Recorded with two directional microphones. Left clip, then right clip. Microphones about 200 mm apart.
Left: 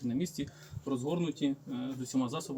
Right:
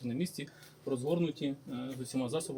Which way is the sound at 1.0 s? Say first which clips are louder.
Even; 10° right (ahead or behind).